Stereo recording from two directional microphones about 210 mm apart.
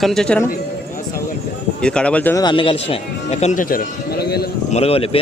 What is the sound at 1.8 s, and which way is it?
Speech, 5° left (ahead or behind).